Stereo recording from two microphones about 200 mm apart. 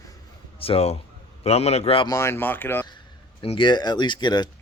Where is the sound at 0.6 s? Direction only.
30° left (ahead or behind).